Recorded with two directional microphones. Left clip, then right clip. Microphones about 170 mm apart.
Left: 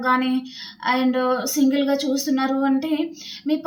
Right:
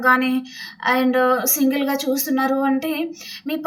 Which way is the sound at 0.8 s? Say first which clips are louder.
Right 3 dB; 10° right (ahead or behind).